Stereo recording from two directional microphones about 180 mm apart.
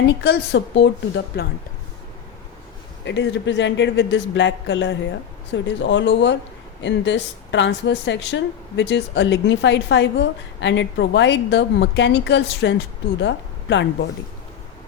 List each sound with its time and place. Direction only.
0.1 s a woman's voice: 70° left (ahead or behind)
3.0 s a woman's voice: 75° left (ahead or behind)